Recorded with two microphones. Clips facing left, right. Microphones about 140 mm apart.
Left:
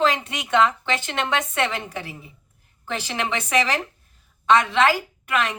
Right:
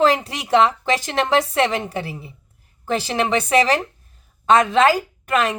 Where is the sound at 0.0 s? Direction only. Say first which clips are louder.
Right 5 dB; 35° right (ahead or behind).